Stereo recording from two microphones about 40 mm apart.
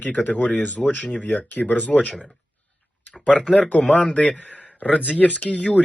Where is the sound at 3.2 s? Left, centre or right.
Left.